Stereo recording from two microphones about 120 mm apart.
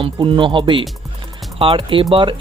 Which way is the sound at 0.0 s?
45° right (ahead or behind).